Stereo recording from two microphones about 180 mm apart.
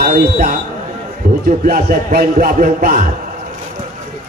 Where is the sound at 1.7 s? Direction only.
55° right (ahead or behind).